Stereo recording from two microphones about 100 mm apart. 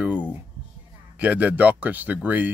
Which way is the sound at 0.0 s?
15° right (ahead or behind).